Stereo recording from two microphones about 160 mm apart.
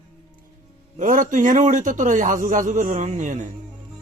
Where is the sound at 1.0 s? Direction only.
55° right (ahead or behind).